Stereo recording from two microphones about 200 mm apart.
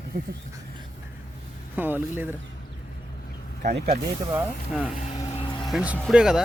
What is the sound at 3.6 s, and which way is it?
Speech, 35° right (ahead or behind).